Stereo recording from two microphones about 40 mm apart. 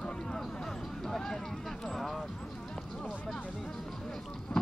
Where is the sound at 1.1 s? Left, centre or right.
Centre.